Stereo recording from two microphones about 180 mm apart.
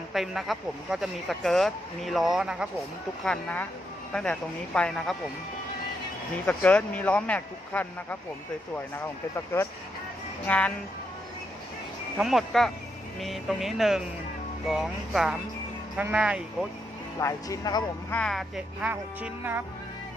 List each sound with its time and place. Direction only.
0.1 s speech: centre (ahead or behind)
6.4 s speech: 5° left (ahead or behind)
12.1 s speech: centre (ahead or behind)
17.2 s speech: 15° left (ahead or behind)
18.1 s speech: 5° left (ahead or behind)